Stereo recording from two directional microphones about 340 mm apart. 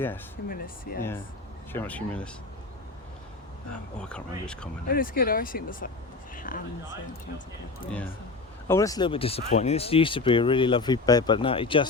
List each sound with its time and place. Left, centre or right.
0.4 s speech: left
1.7 s speech: centre
4.0 s speech: centre
4.9 s speech: left
8.6 s speech: centre